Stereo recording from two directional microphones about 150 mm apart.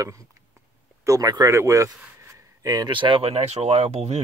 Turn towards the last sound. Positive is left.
turn(degrees=-45)  # may be behind; listen again after turning